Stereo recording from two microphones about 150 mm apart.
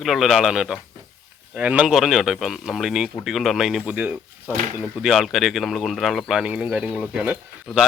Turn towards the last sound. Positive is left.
turn(degrees=-5)  # may be behind; listen again after turning